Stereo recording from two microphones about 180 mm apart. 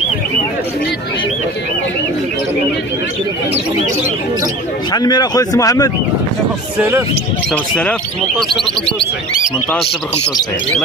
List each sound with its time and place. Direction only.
4.9 s speech: 20° left (ahead or behind)
6.8 s speech: 10° right (ahead or behind)
7.5 s speech: 5° left (ahead or behind)